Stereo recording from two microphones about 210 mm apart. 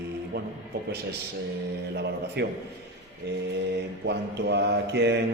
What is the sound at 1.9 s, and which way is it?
Mantra, 50° right (ahead or behind).